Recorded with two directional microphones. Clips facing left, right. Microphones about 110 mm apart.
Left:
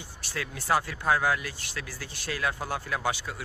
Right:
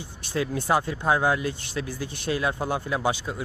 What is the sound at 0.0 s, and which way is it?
Speech, 20° right (ahead or behind).